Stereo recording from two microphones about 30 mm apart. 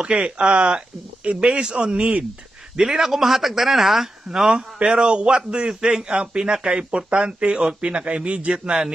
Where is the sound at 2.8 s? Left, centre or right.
Centre.